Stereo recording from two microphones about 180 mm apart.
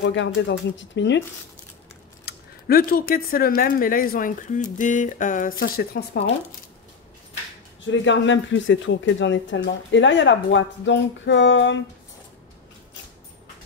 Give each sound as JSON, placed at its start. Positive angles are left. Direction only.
{"t": 0.0, "sound": "speech", "side_deg": 85}
{"t": 2.2, "sound": "speech", "side_deg": 55}
{"t": 7.8, "sound": "speech", "side_deg": 90}